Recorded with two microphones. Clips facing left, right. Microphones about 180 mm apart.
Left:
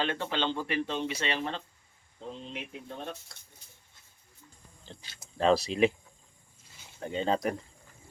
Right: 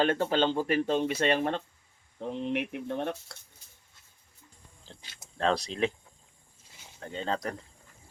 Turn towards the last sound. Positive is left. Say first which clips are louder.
# left 4 dB
turn(degrees=10)  # may be behind; listen again after turning